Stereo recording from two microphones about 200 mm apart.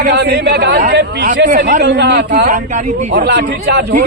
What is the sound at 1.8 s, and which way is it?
A man's voice, 55° right (ahead or behind).